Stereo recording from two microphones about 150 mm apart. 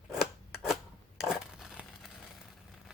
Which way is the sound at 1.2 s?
Centre (ahead or behind).